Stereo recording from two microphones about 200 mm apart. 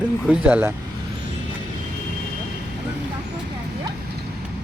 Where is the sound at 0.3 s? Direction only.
10° right (ahead or behind).